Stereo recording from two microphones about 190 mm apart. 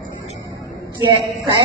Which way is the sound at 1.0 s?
20° right (ahead or behind).